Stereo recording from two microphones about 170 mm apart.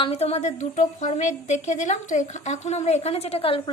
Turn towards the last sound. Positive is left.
turn(degrees=30)  # may be behind; listen again after turning